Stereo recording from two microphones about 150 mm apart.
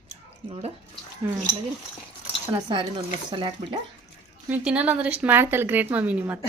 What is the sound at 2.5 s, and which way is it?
Speech, 30° right (ahead or behind).